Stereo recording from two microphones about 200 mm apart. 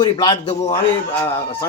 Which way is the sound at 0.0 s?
20° left (ahead or behind).